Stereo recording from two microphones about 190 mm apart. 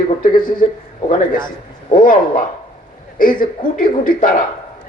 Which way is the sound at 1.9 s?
45° left (ahead or behind).